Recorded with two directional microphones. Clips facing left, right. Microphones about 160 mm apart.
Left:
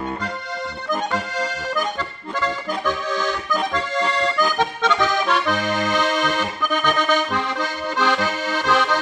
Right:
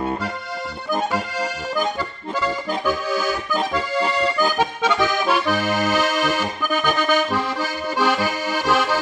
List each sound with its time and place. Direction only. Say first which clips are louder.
2.4 s accordion: right 1 dB; 10° right (ahead or behind)